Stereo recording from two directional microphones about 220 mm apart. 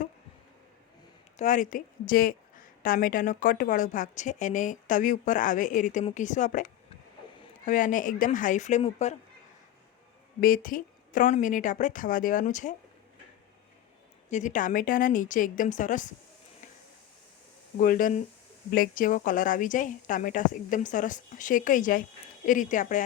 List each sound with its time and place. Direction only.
1.4 s a woman's voice: 35° left (ahead or behind)
10.4 s a woman's voice: 40° left (ahead or behind)
14.3 s a woman's voice: 35° left (ahead or behind)
17.7 s a woman's voice: 40° left (ahead or behind)